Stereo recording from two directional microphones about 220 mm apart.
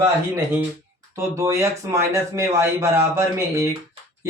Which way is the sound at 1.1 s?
15° right (ahead or behind).